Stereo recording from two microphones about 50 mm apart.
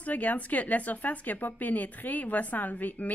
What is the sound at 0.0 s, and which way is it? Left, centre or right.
Speech, left.